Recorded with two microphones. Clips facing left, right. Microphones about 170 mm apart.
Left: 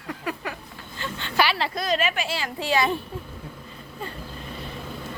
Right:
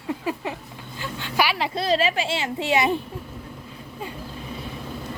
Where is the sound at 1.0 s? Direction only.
10° right (ahead or behind).